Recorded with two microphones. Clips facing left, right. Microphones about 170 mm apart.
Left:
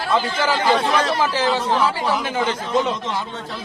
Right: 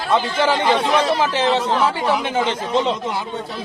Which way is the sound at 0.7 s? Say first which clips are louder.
Right 1 dB; 10° right (ahead or behind).